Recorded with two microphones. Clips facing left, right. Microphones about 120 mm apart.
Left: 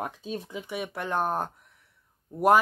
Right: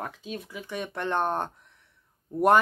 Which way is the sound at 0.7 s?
10° left (ahead or behind).